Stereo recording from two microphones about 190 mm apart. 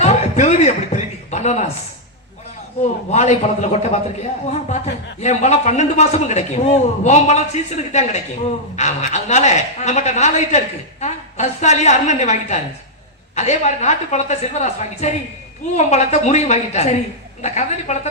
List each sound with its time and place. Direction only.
0.0 s chuckle: 35° left (ahead or behind)
3.1 s a man's voice: 35° left (ahead or behind)